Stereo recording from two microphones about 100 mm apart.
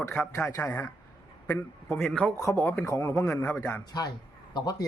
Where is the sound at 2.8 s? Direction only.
30° left (ahead or behind).